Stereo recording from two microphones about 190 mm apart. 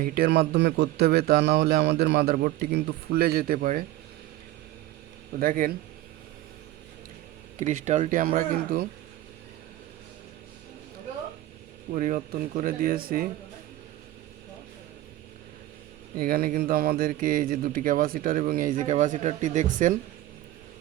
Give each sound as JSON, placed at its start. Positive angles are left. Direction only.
{"t": 0.0, "sound": "a man's voice", "side_deg": -50}
{"t": 5.4, "sound": "speech", "side_deg": -50}
{"t": 7.6, "sound": "speech", "side_deg": -40}
{"t": 11.9, "sound": "speech", "side_deg": -45}
{"t": 16.1, "sound": "speech", "side_deg": -50}